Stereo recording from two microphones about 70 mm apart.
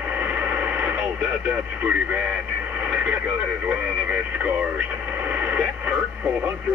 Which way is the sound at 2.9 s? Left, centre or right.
Centre.